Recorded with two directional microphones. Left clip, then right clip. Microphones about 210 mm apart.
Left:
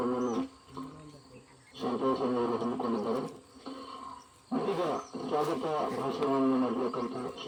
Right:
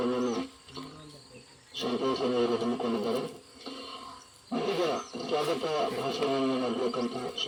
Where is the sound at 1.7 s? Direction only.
50° left (ahead or behind).